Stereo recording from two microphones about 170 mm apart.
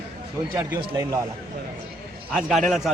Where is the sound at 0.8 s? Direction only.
20° right (ahead or behind).